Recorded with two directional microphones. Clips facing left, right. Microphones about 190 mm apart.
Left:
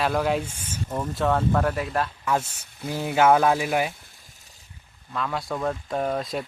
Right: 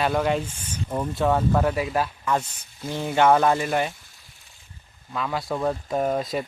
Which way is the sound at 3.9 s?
55° left (ahead or behind).